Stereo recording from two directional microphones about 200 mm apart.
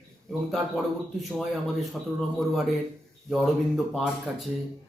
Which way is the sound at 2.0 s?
Centre (ahead or behind).